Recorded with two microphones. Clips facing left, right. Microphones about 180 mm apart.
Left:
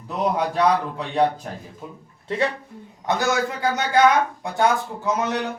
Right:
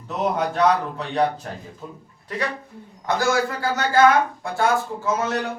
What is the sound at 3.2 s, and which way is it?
Speech, 20° left (ahead or behind).